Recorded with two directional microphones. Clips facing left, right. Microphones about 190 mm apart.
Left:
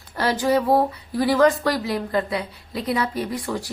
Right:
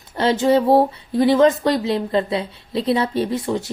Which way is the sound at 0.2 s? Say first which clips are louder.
Right 4 dB; 25° right (ahead or behind).